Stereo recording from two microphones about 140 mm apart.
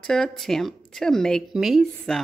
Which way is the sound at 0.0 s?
5° left (ahead or behind).